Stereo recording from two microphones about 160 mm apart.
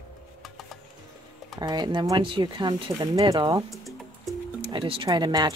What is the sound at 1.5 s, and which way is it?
Speech, 25° right (ahead or behind).